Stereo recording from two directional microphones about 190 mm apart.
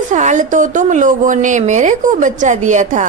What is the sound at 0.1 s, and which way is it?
A woman's voice, 40° right (ahead or behind).